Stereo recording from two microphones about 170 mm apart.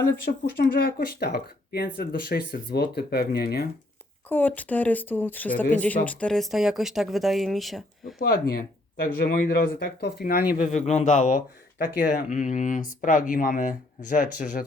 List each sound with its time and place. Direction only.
0.3 s speech: 65° left (ahead or behind)
4.3 s speech: 10° left (ahead or behind)
8.2 s speech: 60° left (ahead or behind)
10.5 s speech: 50° left (ahead or behind)